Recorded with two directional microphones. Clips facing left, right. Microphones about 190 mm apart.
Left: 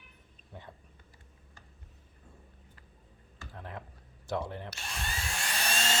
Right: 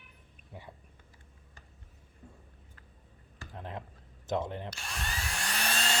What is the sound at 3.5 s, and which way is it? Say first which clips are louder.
Computer keyboard: right 2 dB; 20° right (ahead or behind).